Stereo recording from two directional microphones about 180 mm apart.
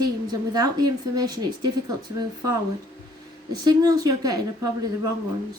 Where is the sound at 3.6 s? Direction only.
20° right (ahead or behind).